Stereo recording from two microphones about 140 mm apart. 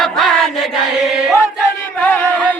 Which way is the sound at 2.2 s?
10° left (ahead or behind).